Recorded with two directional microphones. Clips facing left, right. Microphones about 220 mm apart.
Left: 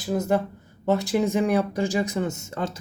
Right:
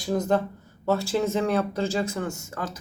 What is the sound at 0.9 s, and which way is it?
Speech, 15° left (ahead or behind).